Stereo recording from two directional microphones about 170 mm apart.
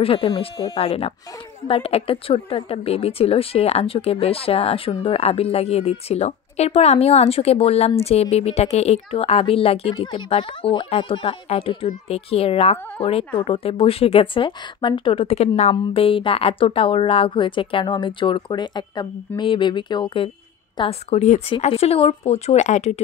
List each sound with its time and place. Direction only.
0.0 s a woman's voice: 35° left (ahead or behind)